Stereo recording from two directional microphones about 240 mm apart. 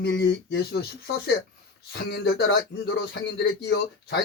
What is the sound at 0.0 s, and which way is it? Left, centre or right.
Speech, left.